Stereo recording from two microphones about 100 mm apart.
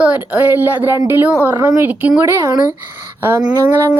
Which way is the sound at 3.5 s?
20° right (ahead or behind).